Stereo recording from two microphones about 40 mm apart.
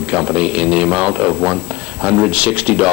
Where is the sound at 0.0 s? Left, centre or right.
Right.